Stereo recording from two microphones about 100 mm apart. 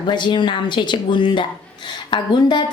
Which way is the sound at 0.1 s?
50° left (ahead or behind).